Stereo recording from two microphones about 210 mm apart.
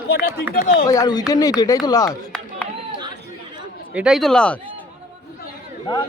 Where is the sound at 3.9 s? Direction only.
5° right (ahead or behind).